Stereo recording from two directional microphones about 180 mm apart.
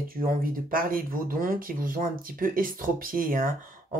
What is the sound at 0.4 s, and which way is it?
Speech, 50° right (ahead or behind).